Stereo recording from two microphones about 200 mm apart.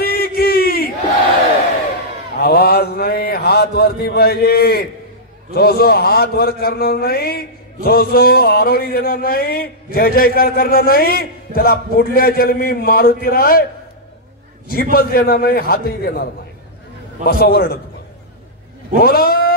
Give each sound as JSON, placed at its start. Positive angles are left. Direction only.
{"t": 0.0, "sound": "a sound", "side_deg": 50}
{"t": 2.4, "sound": "mantra", "side_deg": 50}
{"t": 5.5, "sound": "a man's voice", "side_deg": 50}
{"t": 14.7, "sound": "a man's voice", "side_deg": 50}
{"t": 17.3, "sound": "a man's voice", "side_deg": 50}
{"t": 18.9, "sound": "cat", "side_deg": 50}